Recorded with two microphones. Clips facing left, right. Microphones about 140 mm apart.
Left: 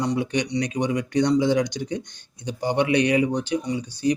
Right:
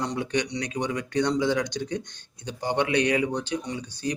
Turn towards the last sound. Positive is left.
turn(degrees=10)  # may be behind; listen again after turning